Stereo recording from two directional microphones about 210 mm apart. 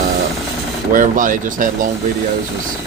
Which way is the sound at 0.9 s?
40° right (ahead or behind).